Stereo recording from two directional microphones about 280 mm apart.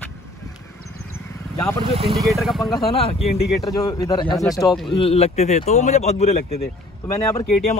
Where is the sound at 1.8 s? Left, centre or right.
Right.